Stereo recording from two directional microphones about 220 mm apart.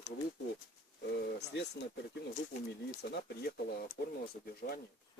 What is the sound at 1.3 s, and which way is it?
Speech, 50° left (ahead or behind).